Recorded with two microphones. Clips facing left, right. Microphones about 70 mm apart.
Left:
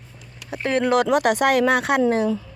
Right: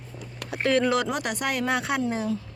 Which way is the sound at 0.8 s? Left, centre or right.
Left.